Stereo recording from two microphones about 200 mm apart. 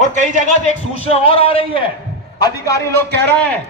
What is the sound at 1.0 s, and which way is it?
Speech, 30° left (ahead or behind).